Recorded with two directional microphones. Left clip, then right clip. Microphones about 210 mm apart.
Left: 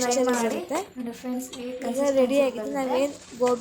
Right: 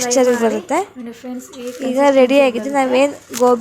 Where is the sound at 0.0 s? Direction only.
20° right (ahead or behind).